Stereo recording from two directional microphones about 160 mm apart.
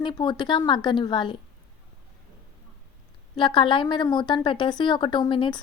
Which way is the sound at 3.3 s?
30° left (ahead or behind).